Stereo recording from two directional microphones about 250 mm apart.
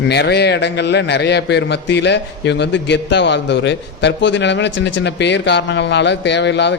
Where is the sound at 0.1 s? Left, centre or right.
Left.